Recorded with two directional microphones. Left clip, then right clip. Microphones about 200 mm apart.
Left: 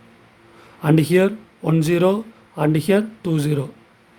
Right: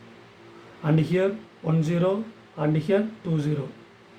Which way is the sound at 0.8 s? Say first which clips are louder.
Left 7 dB; 60° left (ahead or behind).